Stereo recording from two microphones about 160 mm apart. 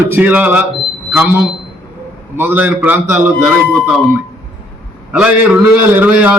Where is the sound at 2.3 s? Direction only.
10° right (ahead or behind).